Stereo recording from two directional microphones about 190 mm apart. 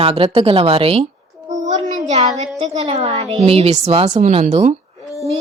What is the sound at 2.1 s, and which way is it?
Speech, 35° right (ahead or behind).